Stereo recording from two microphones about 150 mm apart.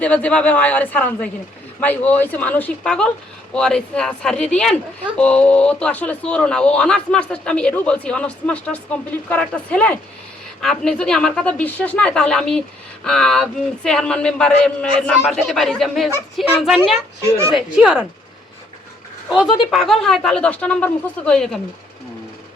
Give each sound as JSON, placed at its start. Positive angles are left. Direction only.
{"t": 0.0, "sound": "speech", "side_deg": 10}
{"t": 17.2, "sound": "speech", "side_deg": -20}
{"t": 17.7, "sound": "speech", "side_deg": -5}
{"t": 19.3, "sound": "speech", "side_deg": 0}